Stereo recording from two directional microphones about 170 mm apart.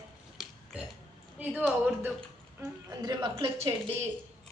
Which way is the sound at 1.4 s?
10° right (ahead or behind).